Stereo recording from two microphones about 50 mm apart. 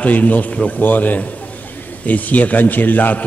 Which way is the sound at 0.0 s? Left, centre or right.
Left.